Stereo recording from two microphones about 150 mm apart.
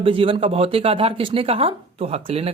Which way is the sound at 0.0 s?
35° right (ahead or behind).